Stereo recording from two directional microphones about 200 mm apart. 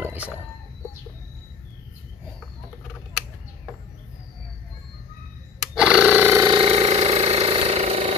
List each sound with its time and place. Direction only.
0.0 s chicken: 10° right (ahead or behind)
5.8 s a sound: 5° right (ahead or behind)
6.5 s engine: 30° right (ahead or behind)